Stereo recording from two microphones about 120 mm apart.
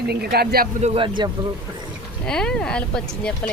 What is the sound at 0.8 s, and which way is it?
Speech, 50° right (ahead or behind).